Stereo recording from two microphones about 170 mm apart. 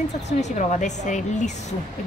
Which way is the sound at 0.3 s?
45° left (ahead or behind).